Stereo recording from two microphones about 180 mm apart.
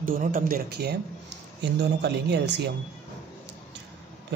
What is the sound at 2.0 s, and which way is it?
Speech, 70° right (ahead or behind).